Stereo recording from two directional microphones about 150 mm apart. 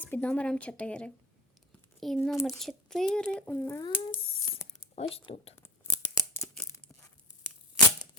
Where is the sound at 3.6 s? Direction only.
20° left (ahead or behind).